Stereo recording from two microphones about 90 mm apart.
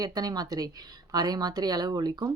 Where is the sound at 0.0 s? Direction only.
45° right (ahead or behind).